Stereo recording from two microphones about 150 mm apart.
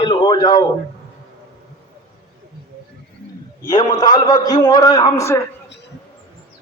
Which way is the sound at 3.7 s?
25° left (ahead or behind).